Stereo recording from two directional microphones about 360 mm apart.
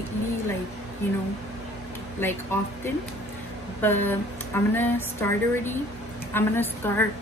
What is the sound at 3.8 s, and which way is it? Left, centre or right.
Speech, centre.